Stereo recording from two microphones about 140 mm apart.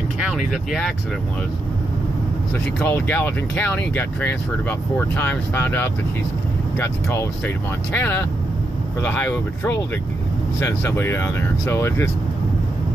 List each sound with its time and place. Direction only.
0.3 s speech: centre (ahead or behind)
2.8 s speech: 15° left (ahead or behind)